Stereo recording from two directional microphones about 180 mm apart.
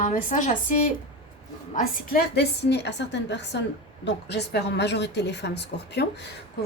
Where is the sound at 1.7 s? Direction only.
60° left (ahead or behind).